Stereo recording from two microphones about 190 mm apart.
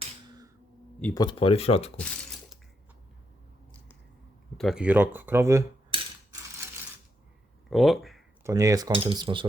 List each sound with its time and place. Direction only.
1.1 s speech: 20° left (ahead or behind)
4.5 s speech: centre (ahead or behind)
5.9 s a sound: 25° right (ahead or behind)
7.7 s speech: centre (ahead or behind)
8.4 s speech: 15° right (ahead or behind)